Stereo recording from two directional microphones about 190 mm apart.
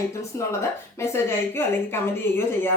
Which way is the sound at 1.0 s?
15° left (ahead or behind).